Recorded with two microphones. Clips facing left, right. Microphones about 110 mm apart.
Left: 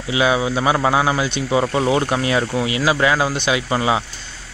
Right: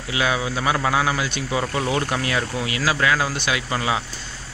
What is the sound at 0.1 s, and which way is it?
Speech, 20° left (ahead or behind).